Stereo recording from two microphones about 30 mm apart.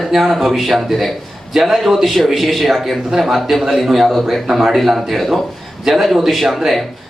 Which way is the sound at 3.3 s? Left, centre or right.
Centre.